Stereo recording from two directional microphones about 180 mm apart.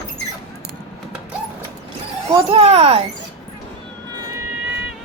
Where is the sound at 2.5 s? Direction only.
30° right (ahead or behind).